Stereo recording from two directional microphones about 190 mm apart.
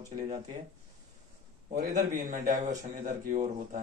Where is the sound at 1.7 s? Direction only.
45° right (ahead or behind).